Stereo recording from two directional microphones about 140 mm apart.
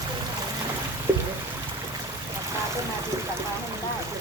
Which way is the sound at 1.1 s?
15° right (ahead or behind).